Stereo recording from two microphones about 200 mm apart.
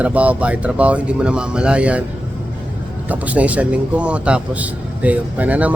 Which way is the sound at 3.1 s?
5° right (ahead or behind).